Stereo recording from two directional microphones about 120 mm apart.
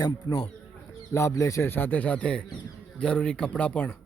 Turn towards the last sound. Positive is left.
turn(degrees=15)  # may be behind; listen again after turning